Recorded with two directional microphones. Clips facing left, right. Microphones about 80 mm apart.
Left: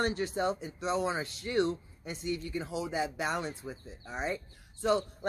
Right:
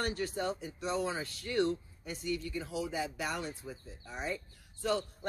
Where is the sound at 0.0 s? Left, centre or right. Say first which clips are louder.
Left 4 dB; left.